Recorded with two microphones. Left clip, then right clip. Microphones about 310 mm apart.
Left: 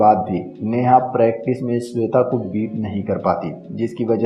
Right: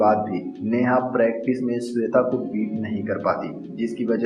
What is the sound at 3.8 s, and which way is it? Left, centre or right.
Speech, left.